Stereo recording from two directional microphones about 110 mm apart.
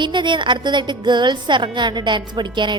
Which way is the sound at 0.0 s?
45° right (ahead or behind).